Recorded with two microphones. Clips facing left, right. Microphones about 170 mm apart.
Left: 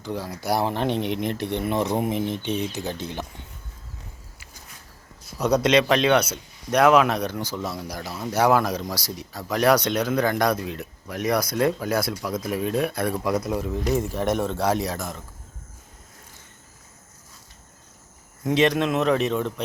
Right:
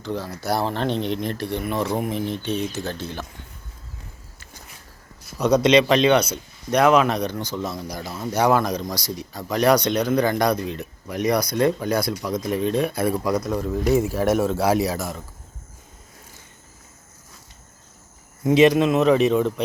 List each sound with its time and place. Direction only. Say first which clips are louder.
0.0 s speech: right 2 dB; 10° left (ahead or behind)
5.4 s speech: right 3 dB; 5° left (ahead or behind)
18.4 s speech: right 5 dB; 5° right (ahead or behind)